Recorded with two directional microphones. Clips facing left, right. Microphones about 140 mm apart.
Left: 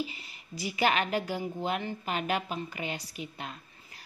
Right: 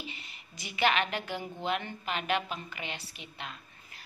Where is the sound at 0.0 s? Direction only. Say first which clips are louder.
Left 8 dB; 35° left (ahead or behind).